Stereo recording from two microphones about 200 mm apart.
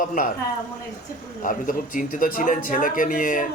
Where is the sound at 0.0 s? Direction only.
40° left (ahead or behind).